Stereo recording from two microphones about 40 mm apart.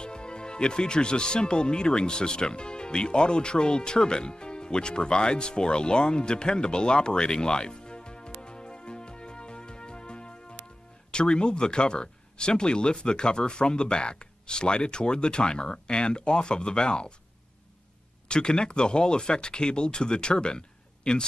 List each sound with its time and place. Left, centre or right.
0.0 s speech: left
18.3 s speech: left